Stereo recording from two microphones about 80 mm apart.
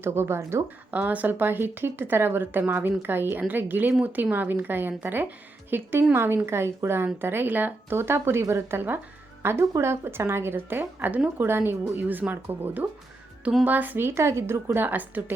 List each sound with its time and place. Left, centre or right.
0.0 s a woman's voice: right
0.9 s a woman's voice: centre